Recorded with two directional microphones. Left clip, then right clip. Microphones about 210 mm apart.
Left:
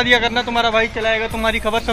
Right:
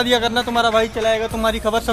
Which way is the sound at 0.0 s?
10° right (ahead or behind).